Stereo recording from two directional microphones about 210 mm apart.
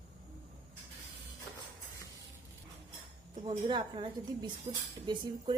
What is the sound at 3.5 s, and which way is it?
A woman's voice, 20° right (ahead or behind).